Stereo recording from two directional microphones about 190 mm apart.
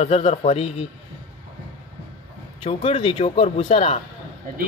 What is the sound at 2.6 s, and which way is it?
Speech, 30° left (ahead or behind).